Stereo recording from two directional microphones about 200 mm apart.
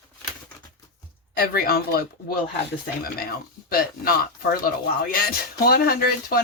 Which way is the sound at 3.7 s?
50° left (ahead or behind).